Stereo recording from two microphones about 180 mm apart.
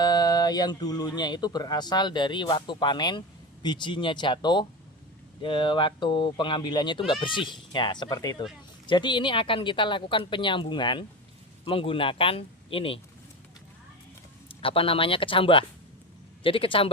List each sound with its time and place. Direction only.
0.0 s speech: 20° left (ahead or behind)
14.4 s a man's voice: 30° left (ahead or behind)